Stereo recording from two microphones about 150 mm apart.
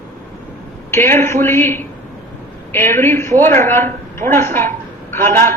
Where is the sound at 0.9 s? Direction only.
15° left (ahead or behind).